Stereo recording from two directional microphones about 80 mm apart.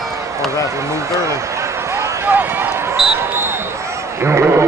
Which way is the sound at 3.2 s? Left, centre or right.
Right.